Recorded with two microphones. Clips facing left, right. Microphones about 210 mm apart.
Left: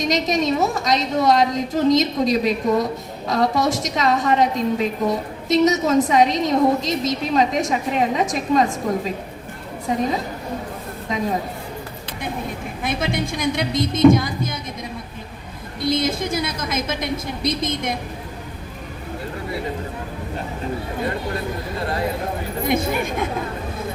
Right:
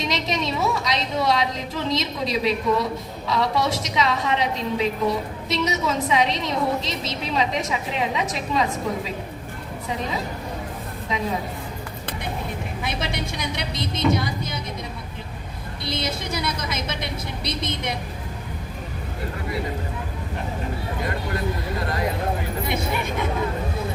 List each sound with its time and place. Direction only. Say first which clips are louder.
0.0 s a woman's voice: left 6 dB; 45° left (ahead or behind)
9.9 s a woman's voice: left 6 dB; 45° left (ahead or behind)
12.8 s a woman's voice: left 7 dB; 50° left (ahead or behind)
15.8 s a woman's voice: left 8 dB; 50° left (ahead or behind)
22.6 s a woman's voice: left 8 dB; 50° left (ahead or behind)